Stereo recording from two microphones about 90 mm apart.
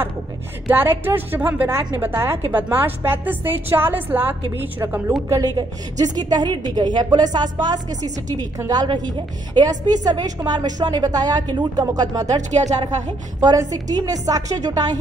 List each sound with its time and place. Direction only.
0.7 s a woman's voice: 25° right (ahead or behind)
5.3 s a woman's voice: 45° right (ahead or behind)
13.4 s a woman's voice: 45° right (ahead or behind)